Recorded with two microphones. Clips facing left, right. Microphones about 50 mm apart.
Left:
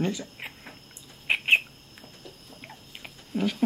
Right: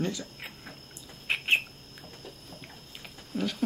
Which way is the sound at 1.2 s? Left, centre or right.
Left.